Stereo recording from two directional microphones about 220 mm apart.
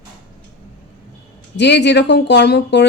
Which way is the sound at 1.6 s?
50° left (ahead or behind).